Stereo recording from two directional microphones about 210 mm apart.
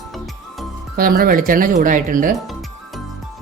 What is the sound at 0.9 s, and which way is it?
Speech, 45° right (ahead or behind).